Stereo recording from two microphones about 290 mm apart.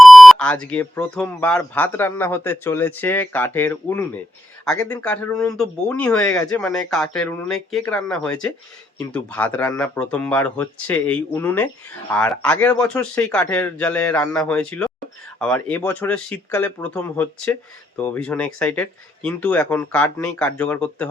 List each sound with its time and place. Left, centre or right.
0.0 s speech: centre